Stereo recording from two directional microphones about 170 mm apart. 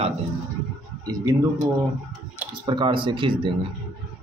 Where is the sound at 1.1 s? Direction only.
20° right (ahead or behind).